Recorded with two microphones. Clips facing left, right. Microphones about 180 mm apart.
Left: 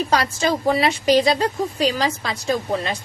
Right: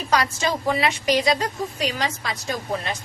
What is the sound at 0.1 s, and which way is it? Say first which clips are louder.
A woman's voice: right 2 dB; 35° left (ahead or behind).